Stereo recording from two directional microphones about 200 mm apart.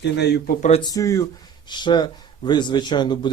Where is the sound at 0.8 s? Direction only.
20° left (ahead or behind).